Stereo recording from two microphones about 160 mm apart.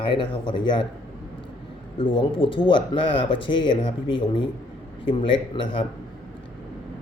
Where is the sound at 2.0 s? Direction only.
30° left (ahead or behind).